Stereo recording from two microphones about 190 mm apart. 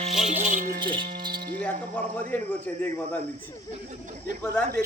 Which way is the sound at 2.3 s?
10° left (ahead or behind).